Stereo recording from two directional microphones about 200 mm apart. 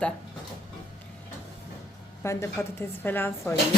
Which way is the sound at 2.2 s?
15° left (ahead or behind).